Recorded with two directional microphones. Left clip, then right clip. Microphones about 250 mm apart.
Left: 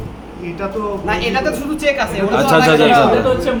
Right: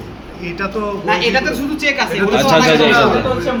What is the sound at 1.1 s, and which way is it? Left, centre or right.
Speech, left.